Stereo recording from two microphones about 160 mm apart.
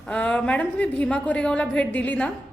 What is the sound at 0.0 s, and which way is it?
A woman's voice, 5° left (ahead or behind).